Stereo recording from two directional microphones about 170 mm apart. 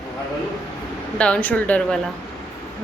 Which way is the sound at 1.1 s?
5° left (ahead or behind).